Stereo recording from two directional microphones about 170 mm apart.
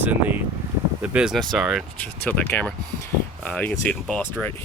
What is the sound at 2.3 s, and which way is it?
Speech, 10° left (ahead or behind).